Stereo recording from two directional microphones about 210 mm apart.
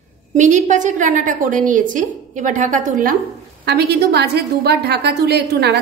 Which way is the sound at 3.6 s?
50° right (ahead or behind).